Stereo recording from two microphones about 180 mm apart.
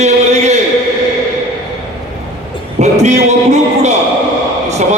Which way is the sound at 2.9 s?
40° right (ahead or behind).